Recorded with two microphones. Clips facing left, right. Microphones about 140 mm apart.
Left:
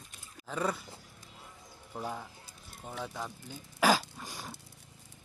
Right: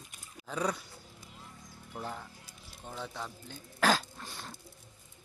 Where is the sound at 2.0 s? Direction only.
10° left (ahead or behind).